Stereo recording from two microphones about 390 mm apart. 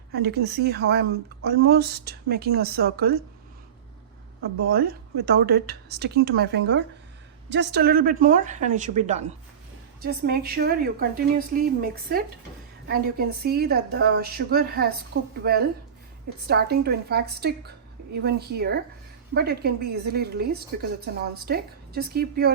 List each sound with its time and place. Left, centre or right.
0.1 s a woman's voice: right
4.5 s a woman's voice: right